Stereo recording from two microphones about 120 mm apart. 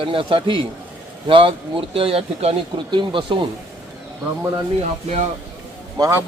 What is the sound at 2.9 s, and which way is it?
Speech, 45° right (ahead or behind).